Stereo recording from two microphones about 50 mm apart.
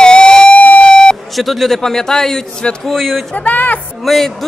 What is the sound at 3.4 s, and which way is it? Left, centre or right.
Speech, left.